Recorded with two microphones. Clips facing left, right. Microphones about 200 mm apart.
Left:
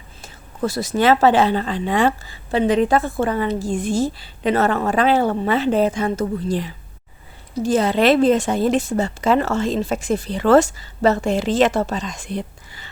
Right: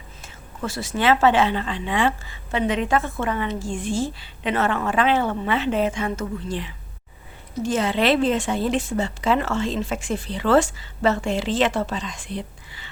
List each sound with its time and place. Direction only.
0.2 s a woman's voice: 40° left (ahead or behind)